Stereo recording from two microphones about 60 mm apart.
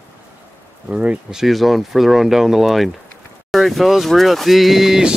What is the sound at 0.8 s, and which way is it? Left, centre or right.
Speech, centre.